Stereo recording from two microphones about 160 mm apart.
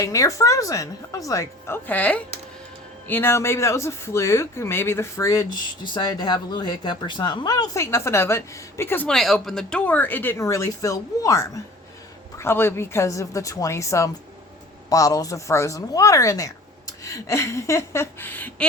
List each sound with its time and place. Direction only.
0.0 s speech: 20° left (ahead or behind)